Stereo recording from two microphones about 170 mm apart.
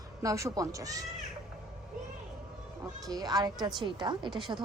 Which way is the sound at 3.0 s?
20° right (ahead or behind).